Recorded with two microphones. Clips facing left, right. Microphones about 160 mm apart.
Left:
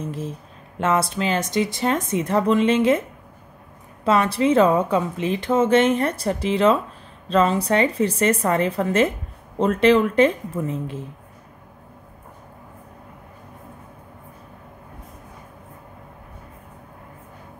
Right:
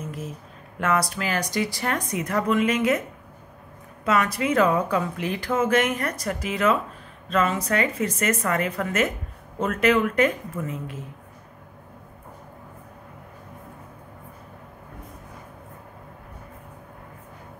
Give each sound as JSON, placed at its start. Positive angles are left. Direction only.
{"t": 0.0, "sound": "speech", "side_deg": 30}
{"t": 4.0, "sound": "a woman's voice", "side_deg": 30}